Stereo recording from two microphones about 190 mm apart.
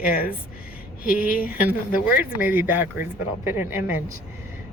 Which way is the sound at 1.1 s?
5° right (ahead or behind).